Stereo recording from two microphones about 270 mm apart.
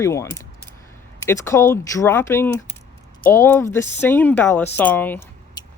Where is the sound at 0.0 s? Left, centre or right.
Centre.